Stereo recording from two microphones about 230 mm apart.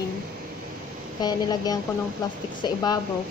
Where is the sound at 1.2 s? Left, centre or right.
Centre.